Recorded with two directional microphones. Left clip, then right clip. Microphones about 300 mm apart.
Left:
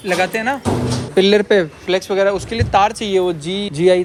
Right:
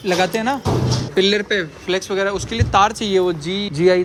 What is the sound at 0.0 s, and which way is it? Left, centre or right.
Speech, centre.